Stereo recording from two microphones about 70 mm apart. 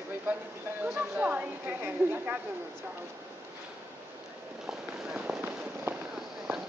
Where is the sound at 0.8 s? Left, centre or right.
Right.